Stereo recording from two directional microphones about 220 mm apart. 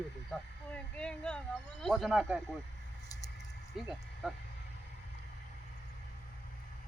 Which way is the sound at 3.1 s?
15° left (ahead or behind).